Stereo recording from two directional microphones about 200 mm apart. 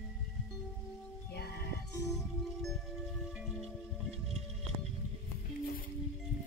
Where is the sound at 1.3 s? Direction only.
50° left (ahead or behind).